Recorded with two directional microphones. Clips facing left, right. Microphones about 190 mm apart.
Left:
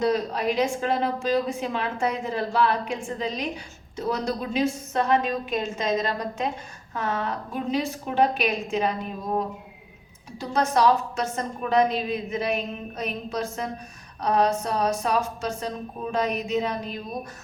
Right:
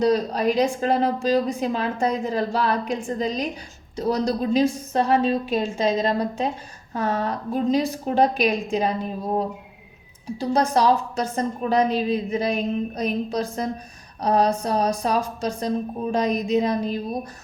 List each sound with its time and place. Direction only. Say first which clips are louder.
0.0 s a woman's voice: right 4 dB; 35° right (ahead or behind)